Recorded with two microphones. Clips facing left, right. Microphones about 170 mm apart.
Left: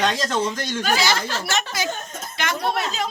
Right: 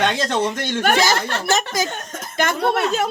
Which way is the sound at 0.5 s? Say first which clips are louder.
Right 4 dB; 65° right (ahead or behind).